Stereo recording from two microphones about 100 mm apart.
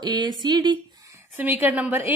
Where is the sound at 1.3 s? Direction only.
20° right (ahead or behind).